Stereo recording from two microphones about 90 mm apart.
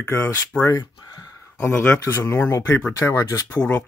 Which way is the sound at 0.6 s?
45° left (ahead or behind).